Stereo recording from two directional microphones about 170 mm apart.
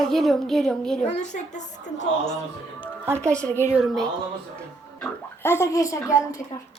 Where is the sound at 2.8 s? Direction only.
15° right (ahead or behind).